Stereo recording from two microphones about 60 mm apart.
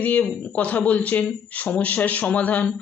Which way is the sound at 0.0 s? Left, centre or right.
Left.